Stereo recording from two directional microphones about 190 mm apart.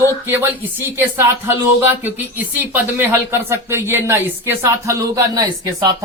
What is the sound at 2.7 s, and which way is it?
Speech, 10° right (ahead or behind).